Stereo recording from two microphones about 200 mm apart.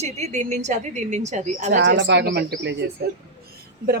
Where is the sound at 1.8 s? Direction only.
65° right (ahead or behind).